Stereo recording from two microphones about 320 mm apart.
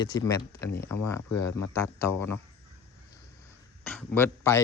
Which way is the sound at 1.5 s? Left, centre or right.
Left.